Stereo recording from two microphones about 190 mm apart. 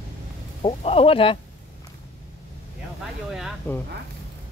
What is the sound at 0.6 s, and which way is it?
Speech, 30° left (ahead or behind).